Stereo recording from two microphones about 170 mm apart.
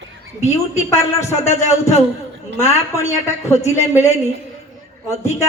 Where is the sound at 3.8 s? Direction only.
40° left (ahead or behind).